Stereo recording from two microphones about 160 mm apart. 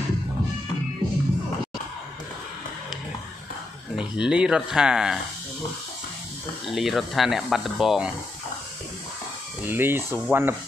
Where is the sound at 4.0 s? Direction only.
5° right (ahead or behind).